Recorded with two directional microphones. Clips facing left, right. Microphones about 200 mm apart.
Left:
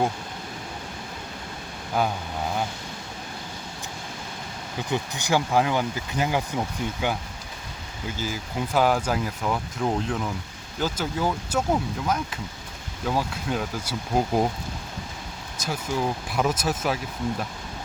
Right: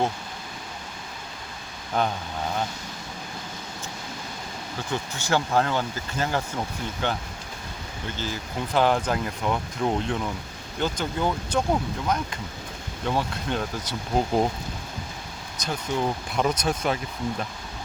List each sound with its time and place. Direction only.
2.0 s speech: 5° left (ahead or behind)
4.9 s speech: 15° left (ahead or behind)
15.6 s speech: 5° left (ahead or behind)